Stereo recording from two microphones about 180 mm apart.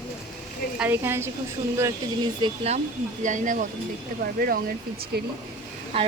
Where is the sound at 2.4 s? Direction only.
25° right (ahead or behind).